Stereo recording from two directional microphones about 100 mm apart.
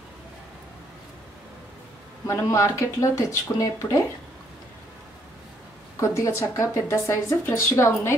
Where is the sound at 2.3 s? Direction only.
30° left (ahead or behind).